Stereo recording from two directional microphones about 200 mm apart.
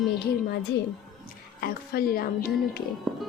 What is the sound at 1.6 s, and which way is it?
Speech, 50° left (ahead or behind).